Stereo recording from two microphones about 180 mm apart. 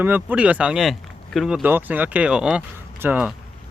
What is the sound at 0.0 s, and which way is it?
Speech, 10° right (ahead or behind).